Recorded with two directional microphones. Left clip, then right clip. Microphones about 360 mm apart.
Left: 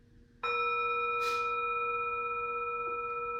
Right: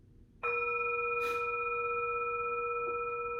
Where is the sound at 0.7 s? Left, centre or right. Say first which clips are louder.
Left 2 dB; centre.